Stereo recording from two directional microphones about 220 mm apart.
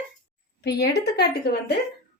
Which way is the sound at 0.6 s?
50° left (ahead or behind).